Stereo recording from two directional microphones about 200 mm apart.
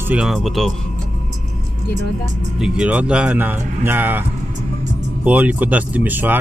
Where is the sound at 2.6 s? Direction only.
5° right (ahead or behind).